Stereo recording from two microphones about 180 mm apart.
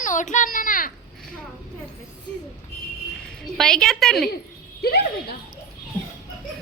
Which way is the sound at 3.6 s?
5° left (ahead or behind).